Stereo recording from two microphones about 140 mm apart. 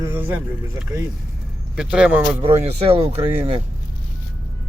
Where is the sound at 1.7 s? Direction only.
5° right (ahead or behind).